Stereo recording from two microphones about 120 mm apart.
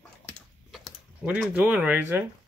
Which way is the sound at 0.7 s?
Centre (ahead or behind).